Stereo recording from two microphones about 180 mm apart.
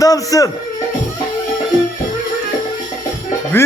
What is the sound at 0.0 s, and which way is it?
Speech, 20° left (ahead or behind).